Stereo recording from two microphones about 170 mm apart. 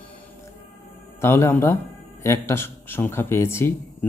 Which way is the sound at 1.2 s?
15° left (ahead or behind).